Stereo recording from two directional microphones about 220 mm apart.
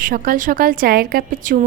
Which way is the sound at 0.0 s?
40° right (ahead or behind).